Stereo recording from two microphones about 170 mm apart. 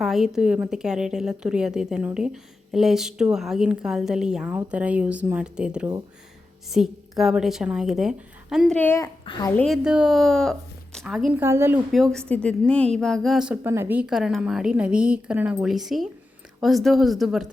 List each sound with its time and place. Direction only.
0.0 s a woman's voice: centre (ahead or behind)
9.2 s a woman's voice: 30° left (ahead or behind)
9.6 s a woman's voice: centre (ahead or behind)
11.3 s a woman's voice: 15° right (ahead or behind)
11.9 s a woman's voice: centre (ahead or behind)
13.7 s a woman's voice: 15° right (ahead or behind)